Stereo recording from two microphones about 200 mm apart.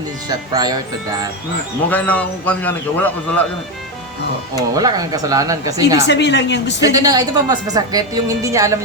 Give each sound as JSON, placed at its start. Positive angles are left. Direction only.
{"t": 0.3, "sound": "speech", "side_deg": -20}
{"t": 1.9, "sound": "a man's voice", "side_deg": 5}
{"t": 4.7, "sound": "speech", "side_deg": -20}
{"t": 6.1, "sound": "a woman's voice", "side_deg": 60}
{"t": 6.8, "sound": "speech", "side_deg": -15}